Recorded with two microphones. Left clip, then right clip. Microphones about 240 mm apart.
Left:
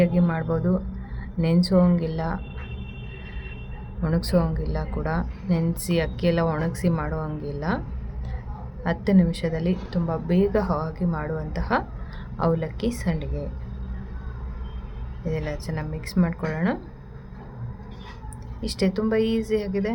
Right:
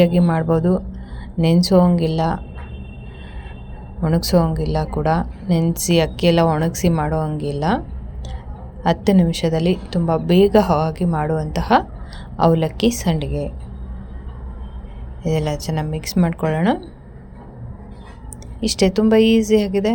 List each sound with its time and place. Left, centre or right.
0.0 s a woman's voice: centre
4.0 s a woman's voice: centre
8.8 s a woman's voice: centre
15.2 s a woman's voice: centre
18.6 s a woman's voice: centre